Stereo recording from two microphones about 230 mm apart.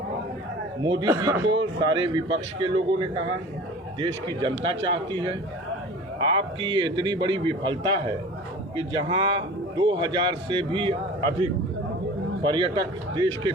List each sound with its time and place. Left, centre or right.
0.8 s a man's voice: centre
4.4 s a man's voice: right
12.4 s a man's voice: right